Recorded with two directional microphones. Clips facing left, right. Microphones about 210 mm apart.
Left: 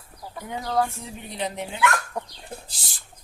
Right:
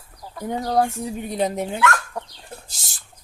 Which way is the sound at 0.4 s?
40° right (ahead or behind).